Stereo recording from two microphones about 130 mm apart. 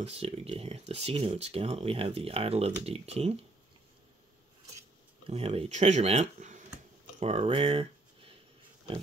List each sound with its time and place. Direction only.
0.0 s speech: 50° right (ahead or behind)
5.2 s speech: 50° right (ahead or behind)
7.2 s speech: 50° right (ahead or behind)